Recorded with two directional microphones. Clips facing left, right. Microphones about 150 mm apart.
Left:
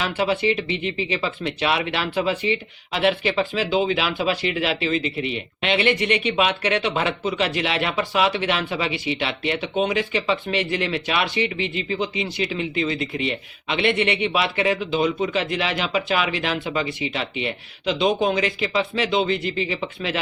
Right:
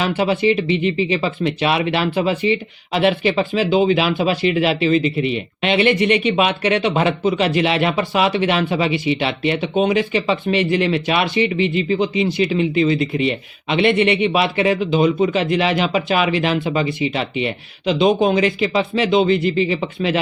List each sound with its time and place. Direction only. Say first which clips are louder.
0.0 s speech: right 5 dB; 20° right (ahead or behind)